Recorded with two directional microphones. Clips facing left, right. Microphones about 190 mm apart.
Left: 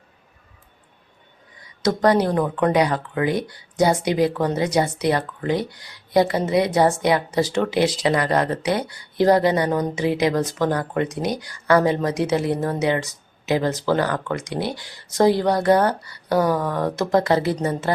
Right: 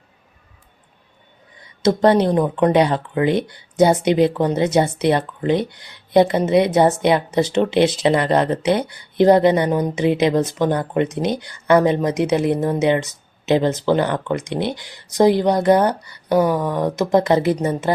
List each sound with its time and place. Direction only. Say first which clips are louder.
1.8 s speech: right 3 dB; 25° right (ahead or behind)